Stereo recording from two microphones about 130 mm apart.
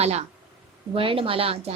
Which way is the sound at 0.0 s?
55° right (ahead or behind).